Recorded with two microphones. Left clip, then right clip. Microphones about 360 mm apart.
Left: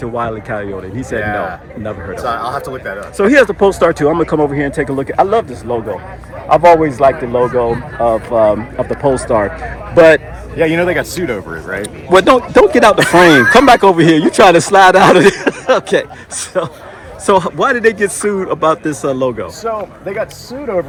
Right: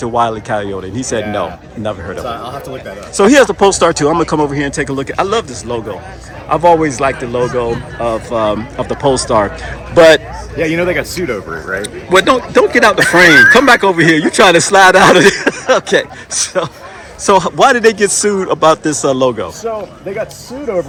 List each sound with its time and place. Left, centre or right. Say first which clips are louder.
0.0 s speech: right 5 dB; centre
10.6 s speech: left 1 dB; left
11.8 s speech: left 1 dB; centre